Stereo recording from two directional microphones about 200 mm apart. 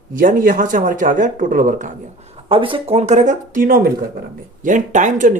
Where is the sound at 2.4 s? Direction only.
25° right (ahead or behind).